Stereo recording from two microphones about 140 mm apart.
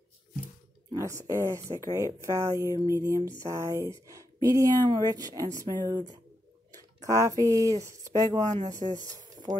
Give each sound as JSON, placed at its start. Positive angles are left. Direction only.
{"t": 0.9, "sound": "speech", "side_deg": -20}